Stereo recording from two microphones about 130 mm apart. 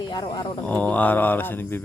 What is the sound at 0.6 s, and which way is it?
Mantra, 10° left (ahead or behind).